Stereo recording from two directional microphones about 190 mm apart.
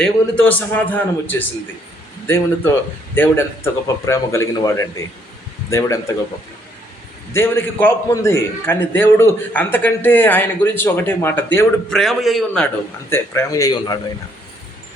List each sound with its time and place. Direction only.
0.0 s a man's voice: 10° left (ahead or behind)
3.2 s a man's voice: 10° left (ahead or behind)
7.3 s a man's voice: 10° left (ahead or behind)
13.1 s a man's voice: 15° left (ahead or behind)